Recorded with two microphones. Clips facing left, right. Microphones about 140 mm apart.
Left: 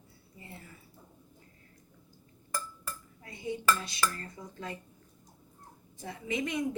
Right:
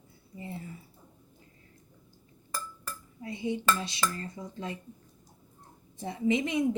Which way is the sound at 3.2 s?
20° right (ahead or behind).